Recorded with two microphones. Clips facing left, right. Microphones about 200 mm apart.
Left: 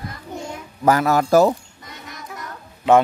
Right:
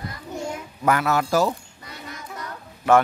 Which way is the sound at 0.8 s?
35° left (ahead or behind).